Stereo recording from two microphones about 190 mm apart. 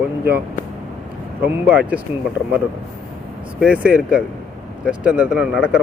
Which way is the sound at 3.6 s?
5° right (ahead or behind).